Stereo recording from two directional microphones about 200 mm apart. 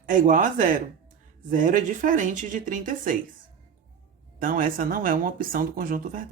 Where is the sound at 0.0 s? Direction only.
40° right (ahead or behind).